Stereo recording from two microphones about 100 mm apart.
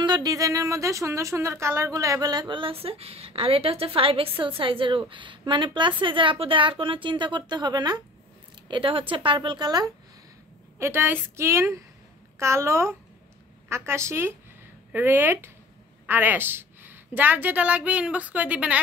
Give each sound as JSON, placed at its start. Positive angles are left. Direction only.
{"t": 0.0, "sound": "speech", "side_deg": -45}
{"t": 2.6, "sound": "a woman's voice", "side_deg": -70}
{"t": 8.6, "sound": "a woman's voice", "side_deg": -55}
{"t": 10.8, "sound": "a woman's voice", "side_deg": -25}